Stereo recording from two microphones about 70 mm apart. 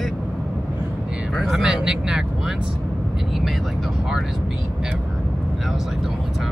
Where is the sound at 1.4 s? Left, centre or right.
Centre.